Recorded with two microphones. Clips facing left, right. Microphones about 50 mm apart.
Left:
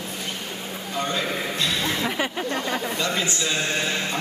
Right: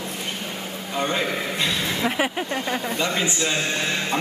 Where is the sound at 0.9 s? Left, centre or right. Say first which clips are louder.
Right 2 dB; right.